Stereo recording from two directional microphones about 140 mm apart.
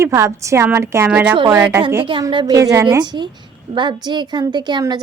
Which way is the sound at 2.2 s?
25° right (ahead or behind).